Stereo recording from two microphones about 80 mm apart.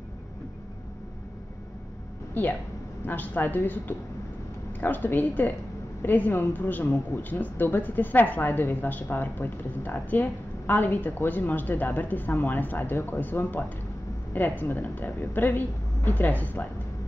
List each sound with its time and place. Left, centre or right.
3.1 s a woman's voice: left